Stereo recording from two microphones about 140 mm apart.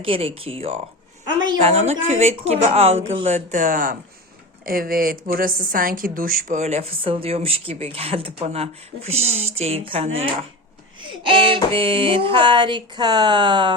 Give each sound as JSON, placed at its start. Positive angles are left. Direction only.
{"t": 0.0, "sound": "speech", "side_deg": -40}
{"t": 1.4, "sound": "speech", "side_deg": -30}
{"t": 1.6, "sound": "a woman's voice", "side_deg": -50}
{"t": 6.6, "sound": "speech", "side_deg": -50}